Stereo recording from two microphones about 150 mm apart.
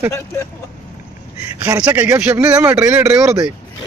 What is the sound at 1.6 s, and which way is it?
A man's voice, 10° right (ahead or behind).